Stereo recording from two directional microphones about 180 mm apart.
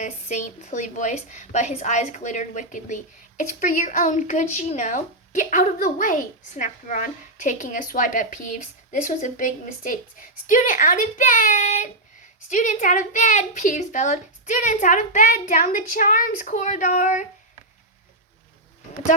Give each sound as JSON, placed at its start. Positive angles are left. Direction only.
{"t": 0.0, "sound": "a woman's voice", "side_deg": 40}